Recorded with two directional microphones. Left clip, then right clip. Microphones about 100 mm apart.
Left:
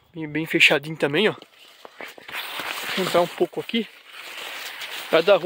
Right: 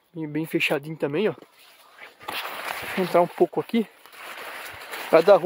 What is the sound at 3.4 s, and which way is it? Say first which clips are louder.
Speech: right 2 dB; 35° right (ahead or behind).